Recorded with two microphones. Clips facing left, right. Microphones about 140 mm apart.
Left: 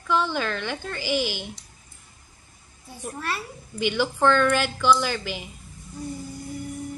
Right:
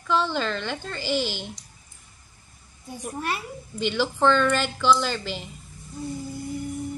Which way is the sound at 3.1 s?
20° right (ahead or behind).